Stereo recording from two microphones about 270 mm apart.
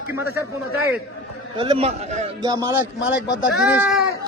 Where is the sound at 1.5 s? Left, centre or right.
Centre.